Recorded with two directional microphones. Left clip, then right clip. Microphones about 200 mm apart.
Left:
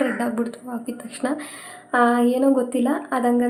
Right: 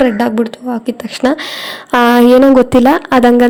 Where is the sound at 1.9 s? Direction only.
55° right (ahead or behind).